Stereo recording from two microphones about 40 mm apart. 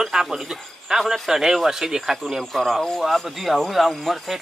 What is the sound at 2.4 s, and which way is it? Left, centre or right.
Speech, centre.